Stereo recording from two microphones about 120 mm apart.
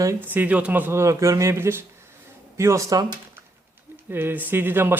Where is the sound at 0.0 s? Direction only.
20° right (ahead or behind).